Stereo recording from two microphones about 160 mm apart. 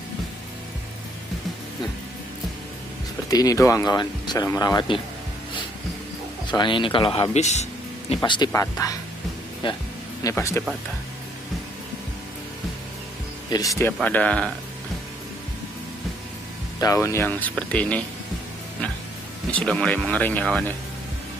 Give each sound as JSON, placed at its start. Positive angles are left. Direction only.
{"t": 3.3, "sound": "speech", "side_deg": 20}
{"t": 6.4, "sound": "speech", "side_deg": 30}
{"t": 8.2, "sound": "speech", "side_deg": 25}
{"t": 9.6, "sound": "speech", "side_deg": 30}
{"t": 10.2, "sound": "speech", "side_deg": 15}
{"t": 13.5, "sound": "speech", "side_deg": 20}
{"t": 14.0, "sound": "speech", "side_deg": 10}
{"t": 16.8, "sound": "speech", "side_deg": 20}
{"t": 19.5, "sound": "speech", "side_deg": 5}